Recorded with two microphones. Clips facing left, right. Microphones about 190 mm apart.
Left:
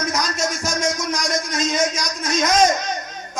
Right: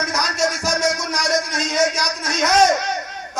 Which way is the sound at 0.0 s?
65° right (ahead or behind).